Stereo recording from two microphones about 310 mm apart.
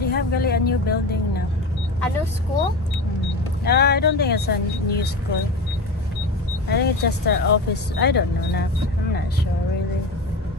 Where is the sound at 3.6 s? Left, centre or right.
Left.